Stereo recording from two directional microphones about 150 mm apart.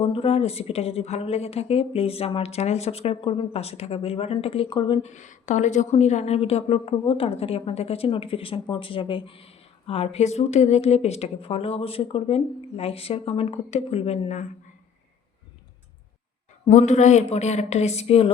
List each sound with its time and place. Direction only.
0.0 s a woman's voice: 40° left (ahead or behind)
5.0 s a woman's voice: 55° left (ahead or behind)
16.6 s speech: 50° left (ahead or behind)